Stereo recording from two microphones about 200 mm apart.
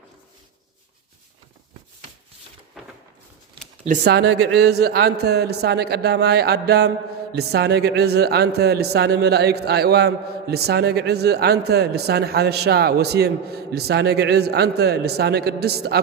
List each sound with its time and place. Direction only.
4.0 s a man's voice: 55° right (ahead or behind)